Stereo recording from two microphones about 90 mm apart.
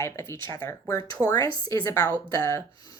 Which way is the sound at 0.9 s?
45° left (ahead or behind).